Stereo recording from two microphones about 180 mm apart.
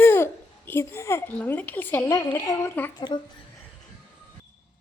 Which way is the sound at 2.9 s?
25° left (ahead or behind).